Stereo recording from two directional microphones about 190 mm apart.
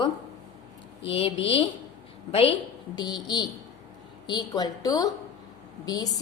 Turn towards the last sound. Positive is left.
turn(degrees=20)  # may be behind; listen again after turning